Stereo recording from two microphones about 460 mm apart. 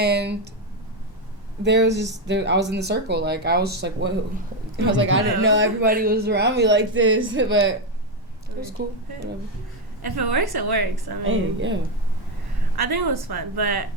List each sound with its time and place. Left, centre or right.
0.0 s speech: right
1.6 s speech: right
10.0 s a woman's voice: right
11.3 s speech: right
12.7 s a woman's voice: right